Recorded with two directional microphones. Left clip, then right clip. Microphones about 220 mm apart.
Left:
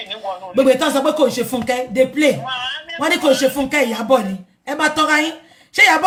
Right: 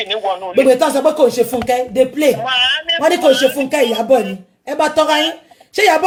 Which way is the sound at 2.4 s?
45° right (ahead or behind).